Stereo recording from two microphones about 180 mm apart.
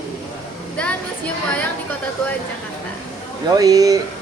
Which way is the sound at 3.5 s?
20° right (ahead or behind).